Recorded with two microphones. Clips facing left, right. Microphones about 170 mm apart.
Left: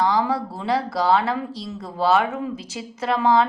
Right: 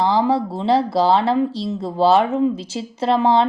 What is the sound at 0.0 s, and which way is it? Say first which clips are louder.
Speech: right 4 dB; 30° right (ahead or behind).